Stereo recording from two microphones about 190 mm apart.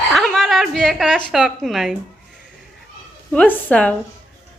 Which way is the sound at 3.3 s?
10° left (ahead or behind).